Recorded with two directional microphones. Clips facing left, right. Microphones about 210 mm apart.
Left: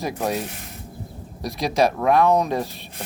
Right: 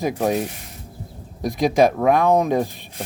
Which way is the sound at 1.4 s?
50° right (ahead or behind).